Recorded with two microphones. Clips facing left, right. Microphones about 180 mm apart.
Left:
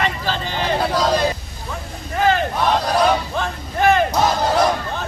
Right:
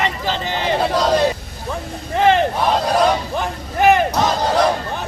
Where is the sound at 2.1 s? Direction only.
25° right (ahead or behind).